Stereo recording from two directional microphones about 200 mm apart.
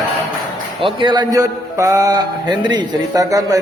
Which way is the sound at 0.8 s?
25° right (ahead or behind).